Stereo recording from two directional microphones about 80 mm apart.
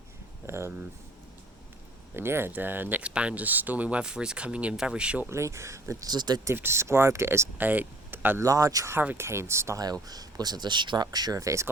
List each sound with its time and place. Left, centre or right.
0.4 s speech: right
2.1 s speech: right
3.0 s speech: centre
5.3 s speech: right
6.1 s speech: right
6.4 s speech: right
7.6 s speech: right
8.4 s speech: right
8.9 s speech: right
9.8 s speech: right